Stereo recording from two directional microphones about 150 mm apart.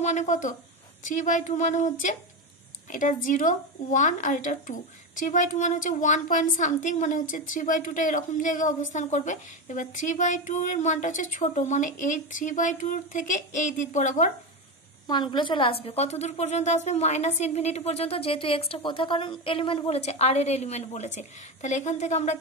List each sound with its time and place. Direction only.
0.0 s a woman's voice: 50° left (ahead or behind)
15.0 s a woman's voice: 30° left (ahead or behind); by 22.4 s 50° left (ahead or behind)